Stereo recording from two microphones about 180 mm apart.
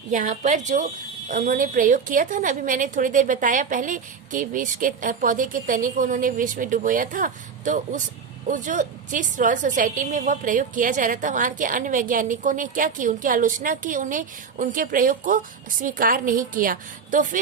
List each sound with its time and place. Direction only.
0.1 s a woman's voice: 45° right (ahead or behind)